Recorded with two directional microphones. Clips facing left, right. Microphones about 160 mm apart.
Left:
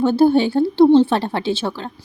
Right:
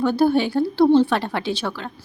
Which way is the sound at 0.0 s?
25° left (ahead or behind).